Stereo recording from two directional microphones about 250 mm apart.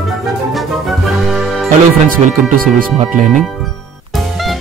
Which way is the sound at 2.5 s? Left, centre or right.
Right.